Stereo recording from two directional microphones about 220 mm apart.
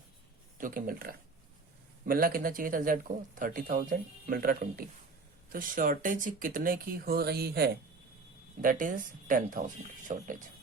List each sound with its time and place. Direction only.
0.6 s speech: 40° right (ahead or behind)